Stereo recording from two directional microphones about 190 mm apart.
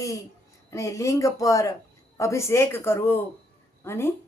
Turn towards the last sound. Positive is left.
turn(degrees=15)  # may be behind; listen again after turning